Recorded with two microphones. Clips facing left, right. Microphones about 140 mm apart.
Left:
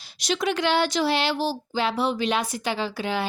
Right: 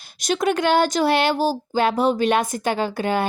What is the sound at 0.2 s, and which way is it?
Speech, 50° right (ahead or behind).